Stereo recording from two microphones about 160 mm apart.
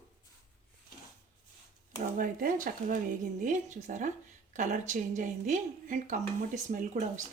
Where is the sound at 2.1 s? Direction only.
60° right (ahead or behind).